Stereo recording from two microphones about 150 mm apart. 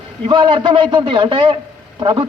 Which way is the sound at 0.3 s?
30° right (ahead or behind).